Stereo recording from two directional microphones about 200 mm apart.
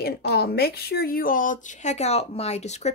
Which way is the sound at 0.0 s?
50° left (ahead or behind).